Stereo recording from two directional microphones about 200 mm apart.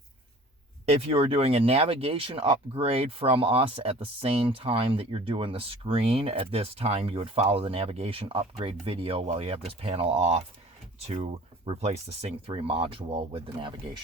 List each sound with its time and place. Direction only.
0.9 s speech: 30° right (ahead or behind)